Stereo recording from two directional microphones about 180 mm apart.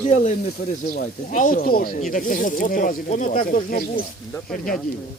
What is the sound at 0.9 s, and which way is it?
Speech, 50° left (ahead or behind).